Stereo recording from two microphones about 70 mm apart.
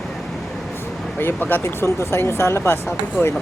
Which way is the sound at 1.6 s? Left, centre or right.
Left.